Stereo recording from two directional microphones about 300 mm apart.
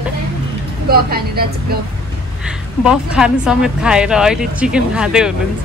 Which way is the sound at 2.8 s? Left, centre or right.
Centre.